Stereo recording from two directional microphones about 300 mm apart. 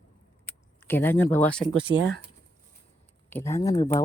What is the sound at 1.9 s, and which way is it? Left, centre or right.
Speech, right.